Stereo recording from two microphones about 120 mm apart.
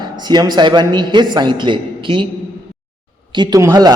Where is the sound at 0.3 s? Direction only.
35° right (ahead or behind).